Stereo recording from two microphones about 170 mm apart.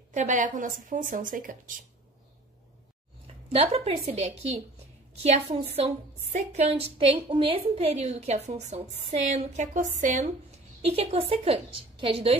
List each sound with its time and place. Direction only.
0.1 s a woman's voice: 45° right (ahead or behind)
3.5 s a woman's voice: 35° right (ahead or behind)